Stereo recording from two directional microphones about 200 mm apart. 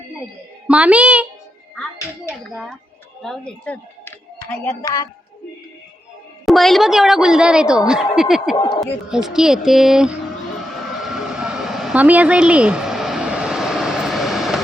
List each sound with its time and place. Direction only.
0.7 s a woman's voice: 5° right (ahead or behind)
3.2 s speech: 5° left (ahead or behind); by 5.0 s 20° left (ahead or behind)
6.4 s a woman's voice: centre (ahead or behind)
8.5 s speech: 20° left (ahead or behind)
8.8 s a woman's voice: 5° right (ahead or behind)
11.0 s vehicle: centre (ahead or behind)